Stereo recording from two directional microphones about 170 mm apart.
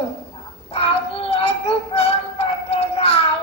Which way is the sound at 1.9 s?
35° left (ahead or behind).